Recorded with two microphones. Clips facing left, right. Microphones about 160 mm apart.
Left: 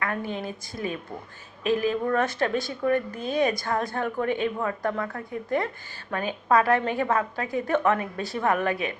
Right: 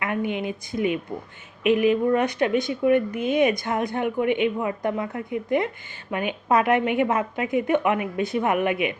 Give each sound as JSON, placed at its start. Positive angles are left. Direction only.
{"t": 0.0, "sound": "a woman's voice", "side_deg": -15}